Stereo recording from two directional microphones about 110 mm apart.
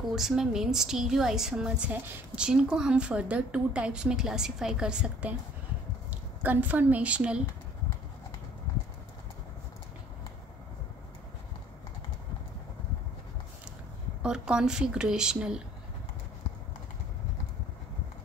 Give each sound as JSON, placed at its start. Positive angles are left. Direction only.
{"t": 0.1, "sound": "a woman's voice", "side_deg": -5}
{"t": 14.2, "sound": "a woman's voice", "side_deg": -5}